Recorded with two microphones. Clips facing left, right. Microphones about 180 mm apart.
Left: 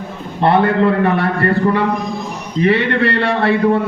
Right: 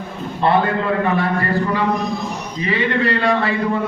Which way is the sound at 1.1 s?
65° left (ahead or behind).